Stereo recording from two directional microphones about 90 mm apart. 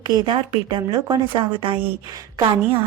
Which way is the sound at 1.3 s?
70° right (ahead or behind).